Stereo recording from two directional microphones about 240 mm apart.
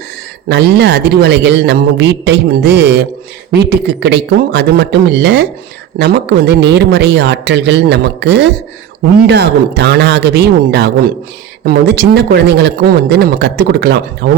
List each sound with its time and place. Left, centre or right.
0.4 s speech: right